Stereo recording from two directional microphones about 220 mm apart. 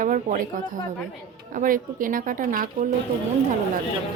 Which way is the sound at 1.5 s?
40° right (ahead or behind).